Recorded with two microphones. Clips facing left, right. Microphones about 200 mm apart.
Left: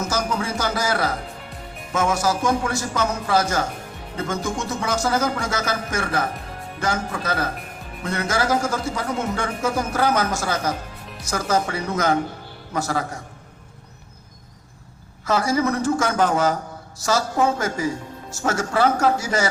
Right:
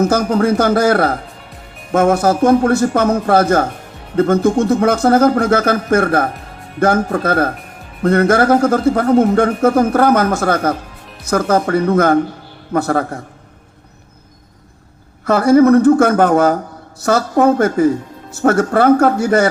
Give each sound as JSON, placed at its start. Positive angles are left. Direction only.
{"t": 0.0, "sound": "speech", "side_deg": -55}
{"t": 15.2, "sound": "speech", "side_deg": -60}